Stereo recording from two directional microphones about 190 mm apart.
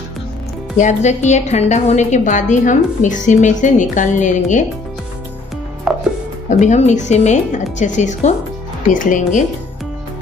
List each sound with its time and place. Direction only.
0.7 s a woman's voice: 40° left (ahead or behind)
5.9 s music: 5° right (ahead or behind)
6.6 s a woman's voice: 40° left (ahead or behind)